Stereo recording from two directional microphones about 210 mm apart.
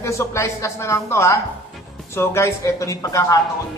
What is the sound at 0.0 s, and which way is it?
Speech, 15° left (ahead or behind).